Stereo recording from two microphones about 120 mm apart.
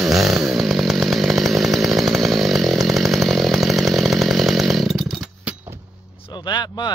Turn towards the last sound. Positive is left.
turn(degrees=35)  # may be behind; listen again after turning